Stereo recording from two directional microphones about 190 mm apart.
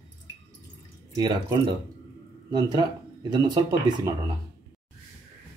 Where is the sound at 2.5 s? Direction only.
20° right (ahead or behind).